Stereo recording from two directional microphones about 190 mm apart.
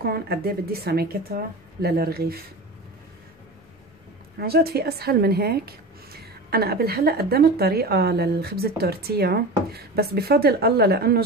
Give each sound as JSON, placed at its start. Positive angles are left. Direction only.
{"t": 0.0, "sound": "a woman's voice", "side_deg": -55}
{"t": 4.4, "sound": "a woman's voice", "side_deg": -55}